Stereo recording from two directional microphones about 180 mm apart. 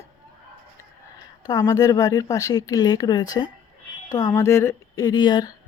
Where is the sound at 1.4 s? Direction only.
20° left (ahead or behind).